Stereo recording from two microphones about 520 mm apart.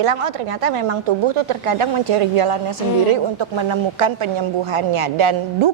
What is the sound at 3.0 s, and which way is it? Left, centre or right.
A woman's voice, right.